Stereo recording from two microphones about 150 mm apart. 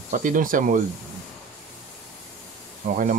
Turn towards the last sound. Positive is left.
turn(degrees=-60)  # may be behind; listen again after turning